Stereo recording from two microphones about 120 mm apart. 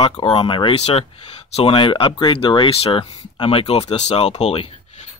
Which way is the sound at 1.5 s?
60° left (ahead or behind).